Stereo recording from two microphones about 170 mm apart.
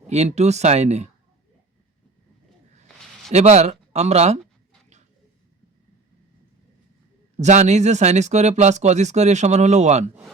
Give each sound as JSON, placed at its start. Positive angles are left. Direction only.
{"t": 0.1, "sound": "speech", "side_deg": -40}
{"t": 3.3, "sound": "speech", "side_deg": -40}
{"t": 7.3, "sound": "speech", "side_deg": -40}